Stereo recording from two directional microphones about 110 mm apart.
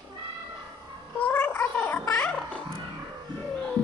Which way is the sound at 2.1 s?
10° left (ahead or behind).